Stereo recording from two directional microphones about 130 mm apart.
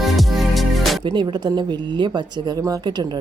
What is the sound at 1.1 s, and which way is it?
Speech, 35° right (ahead or behind).